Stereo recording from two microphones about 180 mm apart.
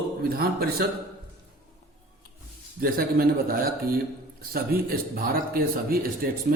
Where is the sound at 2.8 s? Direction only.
55° right (ahead or behind).